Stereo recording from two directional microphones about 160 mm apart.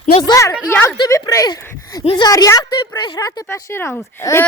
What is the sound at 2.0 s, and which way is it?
Speech, 35° left (ahead or behind).